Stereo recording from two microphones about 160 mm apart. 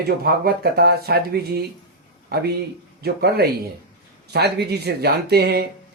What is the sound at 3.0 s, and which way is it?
Speech, 90° right.